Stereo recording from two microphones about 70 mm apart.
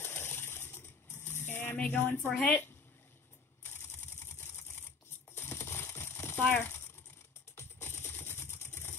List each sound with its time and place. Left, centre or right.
0.0 s a sound: left
1.9 s speech: left
2.3 s speech: centre
3.6 s typewriter: left
5.3 s a sound: left
6.5 s speech: left
7.5 s music: left